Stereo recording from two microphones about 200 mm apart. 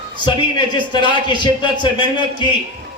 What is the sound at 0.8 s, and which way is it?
Speech, 25° left (ahead or behind).